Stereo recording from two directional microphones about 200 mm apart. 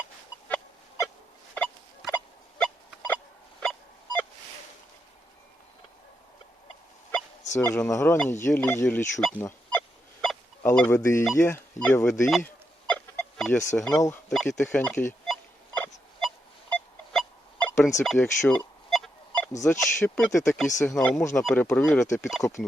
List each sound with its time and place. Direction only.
0.4 s chicken: 10° left (ahead or behind)
1.5 s a sound: 5° left (ahead or behind)
7.5 s speech: 15° left (ahead or behind)
12.9 s chicken: 5° left (ahead or behind)
14.3 s a sound: centre (ahead or behind)
18.0 s telephone dialing: centre (ahead or behind)
19.8 s speech: 5° left (ahead or behind)
22.4 s speech: 35° left (ahead or behind)